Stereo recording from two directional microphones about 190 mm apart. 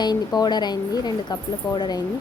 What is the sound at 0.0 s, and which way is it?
Speech, 20° left (ahead or behind).